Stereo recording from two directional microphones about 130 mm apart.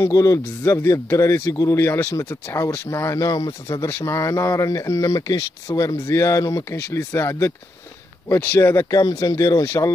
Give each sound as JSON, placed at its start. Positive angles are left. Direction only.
{"t": 0.0, "sound": "speech", "side_deg": 25}